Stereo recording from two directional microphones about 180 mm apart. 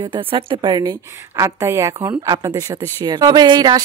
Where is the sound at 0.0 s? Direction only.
30° right (ahead or behind).